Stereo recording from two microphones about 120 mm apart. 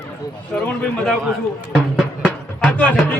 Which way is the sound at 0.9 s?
5° left (ahead or behind).